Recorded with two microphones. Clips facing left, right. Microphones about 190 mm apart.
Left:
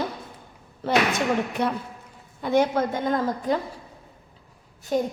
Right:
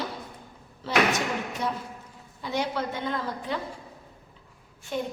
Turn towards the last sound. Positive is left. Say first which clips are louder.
# left 7 dB
turn(degrees=40)  # may be behind; listen again after turning